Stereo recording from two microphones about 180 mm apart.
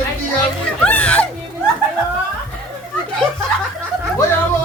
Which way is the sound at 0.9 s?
5° left (ahead or behind).